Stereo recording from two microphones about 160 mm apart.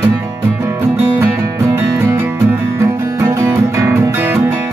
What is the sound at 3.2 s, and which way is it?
Music, 20° right (ahead or behind).